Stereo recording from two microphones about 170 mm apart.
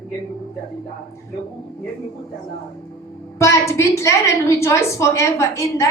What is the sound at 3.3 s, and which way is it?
A woman's voice, 15° left (ahead or behind).